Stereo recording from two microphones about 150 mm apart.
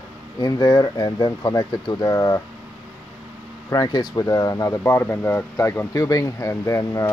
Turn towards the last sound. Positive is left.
turn(degrees=20)  # may be behind; listen again after turning